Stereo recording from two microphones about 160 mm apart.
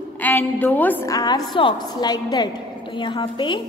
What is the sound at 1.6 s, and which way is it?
A woman's voice, 30° left (ahead or behind).